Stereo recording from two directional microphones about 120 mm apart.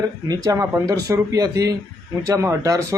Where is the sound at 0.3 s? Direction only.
30° right (ahead or behind).